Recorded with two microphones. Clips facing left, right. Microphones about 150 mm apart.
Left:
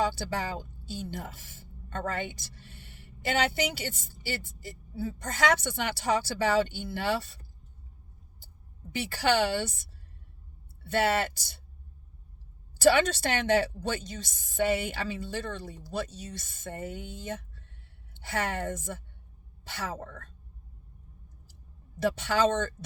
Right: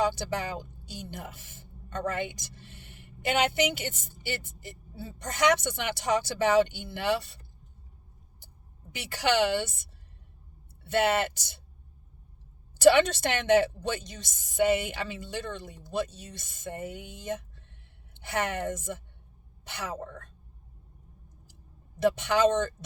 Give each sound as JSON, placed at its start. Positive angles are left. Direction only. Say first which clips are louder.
{"t": 0.0, "sound": "speech", "louder": "right 1 dB", "side_deg": -20}
{"t": 9.0, "sound": "speech", "louder": "even", "side_deg": -15}
{"t": 11.0, "sound": "speech", "louder": "even", "side_deg": -20}
{"t": 12.8, "sound": "speech", "louder": "right 3 dB", "side_deg": -20}
{"t": 21.9, "sound": "speech", "louder": "right 2 dB", "side_deg": -20}